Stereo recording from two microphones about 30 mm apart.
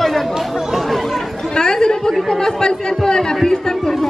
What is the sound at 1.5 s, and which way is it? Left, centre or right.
Chatter, left.